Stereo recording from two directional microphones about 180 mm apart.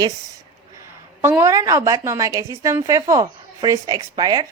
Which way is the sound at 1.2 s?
15° right (ahead or behind).